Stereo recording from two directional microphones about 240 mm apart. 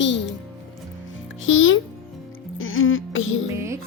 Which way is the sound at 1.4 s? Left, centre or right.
Left.